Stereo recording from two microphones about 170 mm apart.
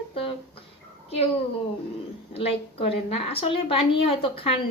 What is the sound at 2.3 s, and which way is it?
A woman's voice, 35° left (ahead or behind).